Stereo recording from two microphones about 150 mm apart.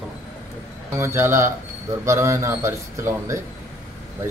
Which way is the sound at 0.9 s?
20° right (ahead or behind).